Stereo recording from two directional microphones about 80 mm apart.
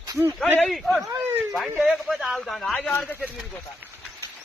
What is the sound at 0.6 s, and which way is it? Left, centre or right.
Speech, centre.